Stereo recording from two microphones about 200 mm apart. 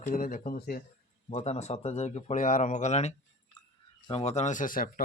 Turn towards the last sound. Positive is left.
turn(degrees=45)  # may be behind; listen again after turning